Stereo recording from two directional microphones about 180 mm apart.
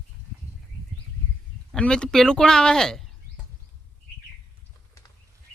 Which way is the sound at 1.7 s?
5° left (ahead or behind).